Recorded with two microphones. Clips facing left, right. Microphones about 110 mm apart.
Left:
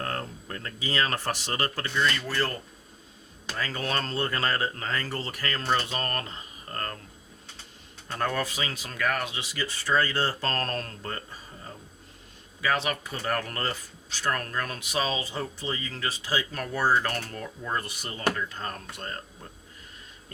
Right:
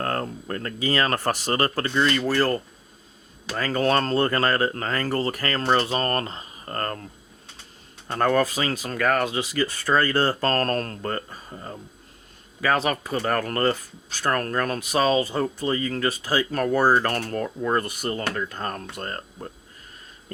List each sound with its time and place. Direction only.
0.0 s speech: 50° right (ahead or behind)
8.0 s speech: 50° right (ahead or behind)
12.6 s speech: 45° right (ahead or behind)